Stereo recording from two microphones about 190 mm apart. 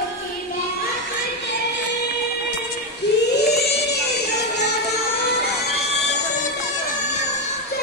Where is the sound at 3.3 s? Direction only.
60° left (ahead or behind).